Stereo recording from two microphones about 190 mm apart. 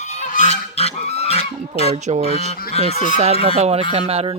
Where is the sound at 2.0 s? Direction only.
35° right (ahead or behind).